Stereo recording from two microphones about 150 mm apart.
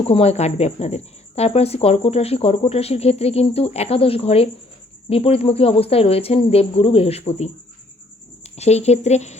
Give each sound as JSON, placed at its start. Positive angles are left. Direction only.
{"t": 0.0, "sound": "speech", "side_deg": 45}